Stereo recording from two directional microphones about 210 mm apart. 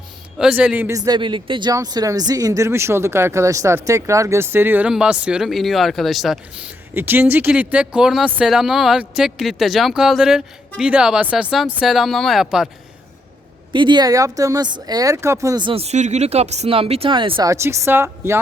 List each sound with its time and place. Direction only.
0.3 s speech: 5° right (ahead or behind)
13.7 s speech: 20° right (ahead or behind)